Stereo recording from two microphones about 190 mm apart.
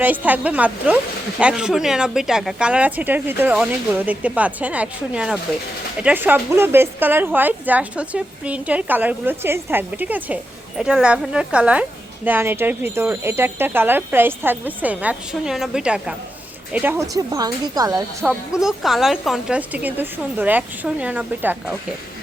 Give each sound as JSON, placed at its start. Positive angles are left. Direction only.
{"t": 0.0, "sound": "a woman's voice", "side_deg": -10}
{"t": 18.2, "sound": "a woman's voice", "side_deg": -5}